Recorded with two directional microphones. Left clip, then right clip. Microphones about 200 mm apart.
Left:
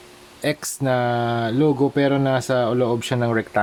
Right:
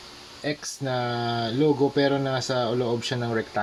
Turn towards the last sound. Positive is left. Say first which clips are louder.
# left 6 dB
turn(degrees=40)  # may be behind; listen again after turning